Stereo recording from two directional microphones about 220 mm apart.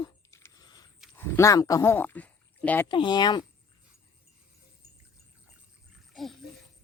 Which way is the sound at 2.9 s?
20° left (ahead or behind).